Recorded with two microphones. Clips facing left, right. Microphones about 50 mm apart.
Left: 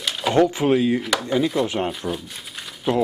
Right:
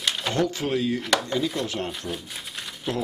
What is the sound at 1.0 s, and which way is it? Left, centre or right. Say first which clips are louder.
Speech: left 3 dB; centre.